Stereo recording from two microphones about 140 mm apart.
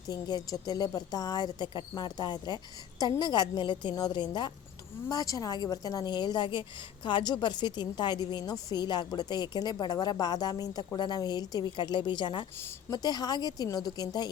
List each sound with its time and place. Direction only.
0.1 s a woman's voice: 30° left (ahead or behind)